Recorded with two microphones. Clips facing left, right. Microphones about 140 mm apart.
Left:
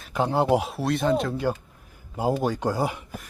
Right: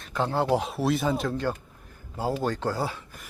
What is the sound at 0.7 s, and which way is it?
Speech, centre (ahead or behind).